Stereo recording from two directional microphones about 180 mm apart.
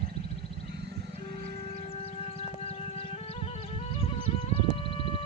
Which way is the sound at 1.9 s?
35° left (ahead or behind).